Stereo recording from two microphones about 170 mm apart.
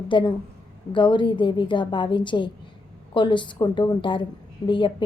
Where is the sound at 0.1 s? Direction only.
30° left (ahead or behind).